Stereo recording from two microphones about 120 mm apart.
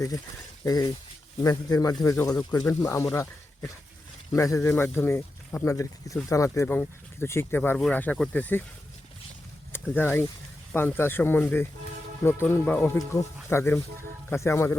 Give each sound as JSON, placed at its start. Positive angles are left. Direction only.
{"t": 0.6, "sound": "speech", "side_deg": 30}
{"t": 4.3, "sound": "speech", "side_deg": 25}
{"t": 9.9, "sound": "speech", "side_deg": 15}